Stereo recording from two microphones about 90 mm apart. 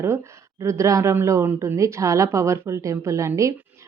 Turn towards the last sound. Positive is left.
turn(degrees=-35)  # may be behind; listen again after turning